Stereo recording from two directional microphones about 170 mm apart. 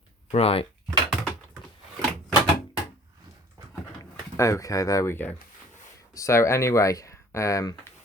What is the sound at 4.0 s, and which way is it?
Speech, 20° left (ahead or behind).